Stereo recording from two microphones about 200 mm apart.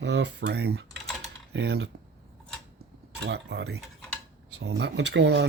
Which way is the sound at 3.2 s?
55° right (ahead or behind).